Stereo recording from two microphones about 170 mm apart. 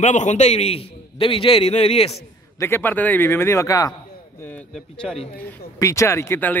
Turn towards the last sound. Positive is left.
turn(degrees=10)  # may be behind; listen again after turning